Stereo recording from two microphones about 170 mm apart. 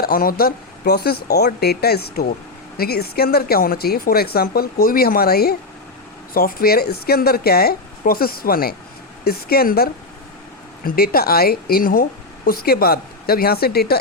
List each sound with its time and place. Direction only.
0.0 s speech: 60° left (ahead or behind)